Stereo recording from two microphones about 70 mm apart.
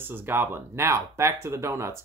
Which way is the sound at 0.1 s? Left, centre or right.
Right.